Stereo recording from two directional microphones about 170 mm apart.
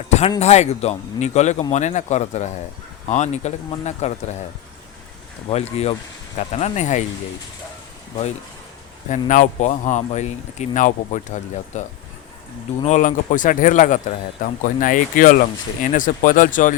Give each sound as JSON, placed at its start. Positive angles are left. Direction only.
{"t": 0.3, "sound": "speech", "side_deg": 40}
{"t": 5.5, "sound": "speech", "side_deg": 40}
{"t": 9.0, "sound": "speech", "side_deg": 45}